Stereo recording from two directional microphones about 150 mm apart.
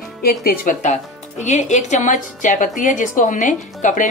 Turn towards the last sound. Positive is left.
turn(degrees=60)  # may be behind; listen again after turning